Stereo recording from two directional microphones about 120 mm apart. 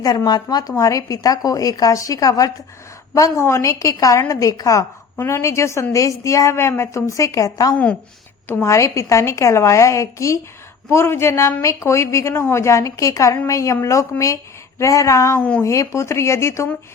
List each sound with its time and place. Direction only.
0.0 s a woman's voice: 35° left (ahead or behind)
15.4 s speech: 10° left (ahead or behind)
15.6 s a woman's voice: 25° left (ahead or behind)